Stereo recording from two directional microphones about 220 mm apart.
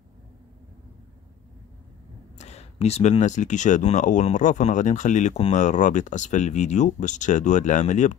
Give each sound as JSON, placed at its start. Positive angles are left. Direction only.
{"t": 2.3, "sound": "speech", "side_deg": 30}